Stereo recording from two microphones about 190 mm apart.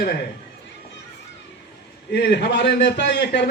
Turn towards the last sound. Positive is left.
turn(degrees=65)  # may be behind; listen again after turning